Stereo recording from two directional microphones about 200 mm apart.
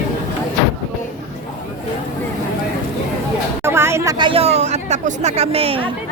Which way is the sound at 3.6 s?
10° right (ahead or behind).